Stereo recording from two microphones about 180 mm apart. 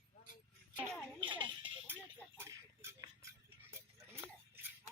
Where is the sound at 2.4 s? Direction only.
15° right (ahead or behind).